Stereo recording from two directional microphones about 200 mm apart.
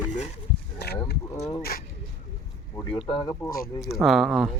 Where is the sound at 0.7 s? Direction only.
50° left (ahead or behind).